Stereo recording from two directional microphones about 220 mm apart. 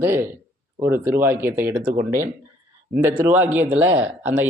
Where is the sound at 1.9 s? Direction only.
35° right (ahead or behind).